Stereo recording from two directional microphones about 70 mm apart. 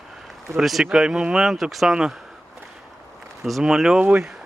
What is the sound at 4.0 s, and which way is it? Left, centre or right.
Speech, centre.